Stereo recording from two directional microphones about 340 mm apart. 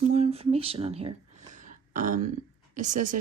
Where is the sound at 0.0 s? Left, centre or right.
Centre.